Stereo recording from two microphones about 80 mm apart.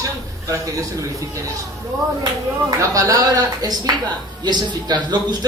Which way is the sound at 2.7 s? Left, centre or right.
Right.